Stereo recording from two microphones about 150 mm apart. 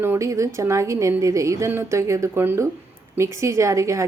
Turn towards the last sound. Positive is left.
turn(degrees=-20)  # may be behind; listen again after turning